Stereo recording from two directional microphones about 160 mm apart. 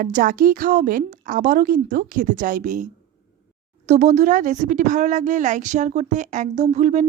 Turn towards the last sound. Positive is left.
turn(degrees=-45)  # may be behind; listen again after turning